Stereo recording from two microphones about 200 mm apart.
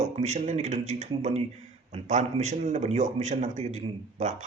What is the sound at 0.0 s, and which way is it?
A man's voice, 35° right (ahead or behind).